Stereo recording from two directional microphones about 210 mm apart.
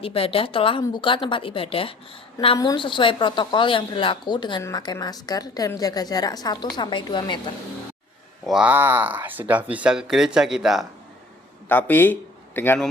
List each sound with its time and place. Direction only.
0.0 s a woman's voice: 25° left (ahead or behind)
8.4 s speech: 5° right (ahead or behind)
11.7 s speech: 10° left (ahead or behind)